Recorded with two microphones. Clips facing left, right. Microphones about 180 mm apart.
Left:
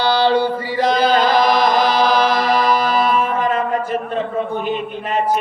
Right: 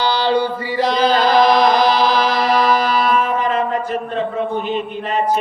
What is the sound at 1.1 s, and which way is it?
Chant, 50° left (ahead or behind).